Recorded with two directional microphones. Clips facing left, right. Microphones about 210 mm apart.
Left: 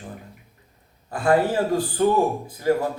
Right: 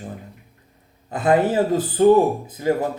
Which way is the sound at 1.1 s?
20° right (ahead or behind).